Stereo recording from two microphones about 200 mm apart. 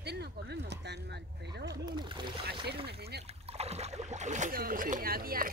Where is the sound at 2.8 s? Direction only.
55° right (ahead or behind).